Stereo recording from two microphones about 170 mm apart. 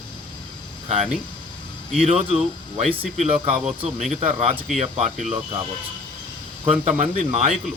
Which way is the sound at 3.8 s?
40° right (ahead or behind).